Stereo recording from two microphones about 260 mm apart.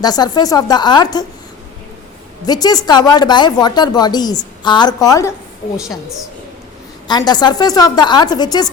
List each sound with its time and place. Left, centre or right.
0.0 s a woman's voice: centre
2.5 s a woman's voice: centre
5.7 s a woman's voice: centre
7.1 s a woman's voice: centre